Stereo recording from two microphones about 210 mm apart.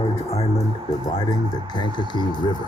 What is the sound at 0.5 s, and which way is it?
Speech, 15° left (ahead or behind).